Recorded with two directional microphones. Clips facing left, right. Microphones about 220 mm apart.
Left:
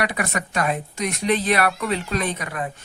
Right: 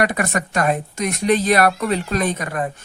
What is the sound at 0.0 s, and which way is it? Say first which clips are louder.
A woman's voice: right 5 dB; 45° right (ahead or behind).